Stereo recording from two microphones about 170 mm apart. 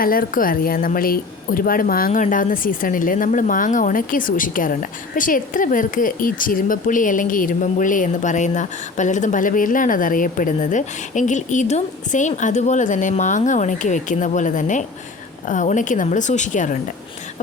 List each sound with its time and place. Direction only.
0.0 s a woman's voice: 55° left (ahead or behind)